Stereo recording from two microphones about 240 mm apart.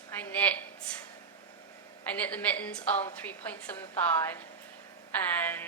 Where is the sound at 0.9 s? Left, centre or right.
Centre.